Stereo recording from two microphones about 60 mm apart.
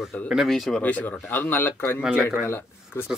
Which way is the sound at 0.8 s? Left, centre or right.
Left.